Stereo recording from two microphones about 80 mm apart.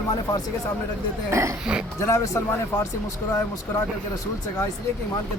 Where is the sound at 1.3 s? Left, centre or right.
Right.